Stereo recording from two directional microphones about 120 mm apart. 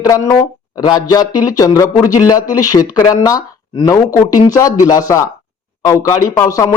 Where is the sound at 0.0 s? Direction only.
30° left (ahead or behind).